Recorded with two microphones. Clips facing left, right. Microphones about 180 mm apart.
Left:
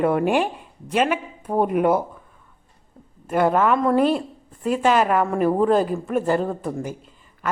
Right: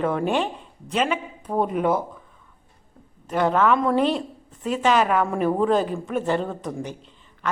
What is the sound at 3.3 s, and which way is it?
A woman's voice, 10° left (ahead or behind).